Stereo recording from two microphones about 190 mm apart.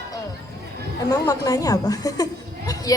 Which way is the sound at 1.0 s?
20° left (ahead or behind).